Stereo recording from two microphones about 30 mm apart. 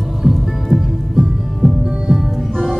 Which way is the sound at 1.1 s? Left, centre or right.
Right.